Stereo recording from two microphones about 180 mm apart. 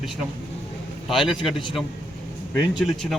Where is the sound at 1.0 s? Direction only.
Centre (ahead or behind).